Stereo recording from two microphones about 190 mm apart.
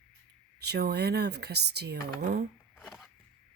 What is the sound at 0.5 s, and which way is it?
A woman's voice, 60° right (ahead or behind).